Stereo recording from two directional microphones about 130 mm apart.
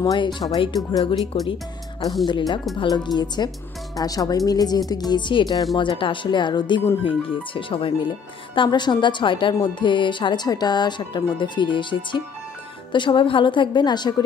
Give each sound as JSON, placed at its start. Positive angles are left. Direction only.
{"t": 0.0, "sound": "a woman's voice", "side_deg": 35}
{"t": 1.3, "sound": "a woman's voice", "side_deg": 45}